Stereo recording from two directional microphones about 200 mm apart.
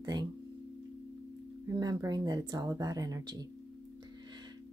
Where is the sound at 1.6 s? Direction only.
20° right (ahead or behind).